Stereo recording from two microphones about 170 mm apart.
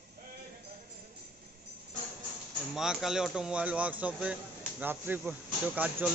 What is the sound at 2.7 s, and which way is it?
Speech, centre (ahead or behind).